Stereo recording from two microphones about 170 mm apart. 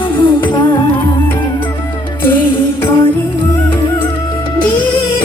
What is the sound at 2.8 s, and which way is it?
Music, 30° left (ahead or behind).